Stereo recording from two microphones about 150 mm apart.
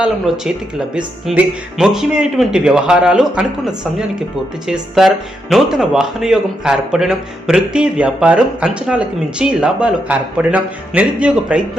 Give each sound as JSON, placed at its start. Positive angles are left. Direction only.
{"t": 0.0, "sound": "speech", "side_deg": -5}